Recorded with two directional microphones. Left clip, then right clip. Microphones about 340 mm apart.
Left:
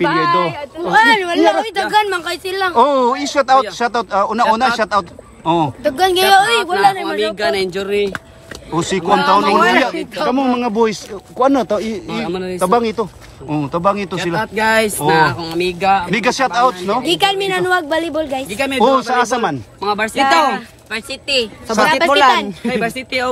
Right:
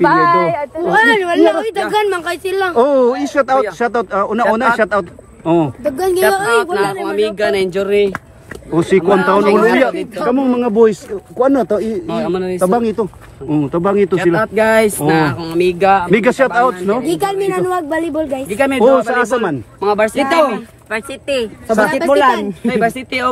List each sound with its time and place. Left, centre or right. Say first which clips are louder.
0.8 s speech: even; centre
2.7 s speech: right 1 dB; centre
5.9 s speech: left 3 dB; centre
12.1 s speech: right 4 dB; centre
12.5 s speech: left 1 dB; centre
14.1 s speech: right 6 dB; centre
18.9 s speech: right 1 dB; centre
19.8 s speech: right 2 dB; centre
21.7 s speech: even; centre